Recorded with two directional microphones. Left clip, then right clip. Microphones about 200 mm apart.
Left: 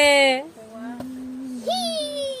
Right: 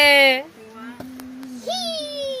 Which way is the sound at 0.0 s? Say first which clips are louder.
Right 3 dB; 10° left (ahead or behind).